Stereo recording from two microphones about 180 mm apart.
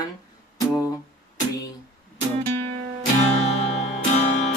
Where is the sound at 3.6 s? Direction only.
35° left (ahead or behind).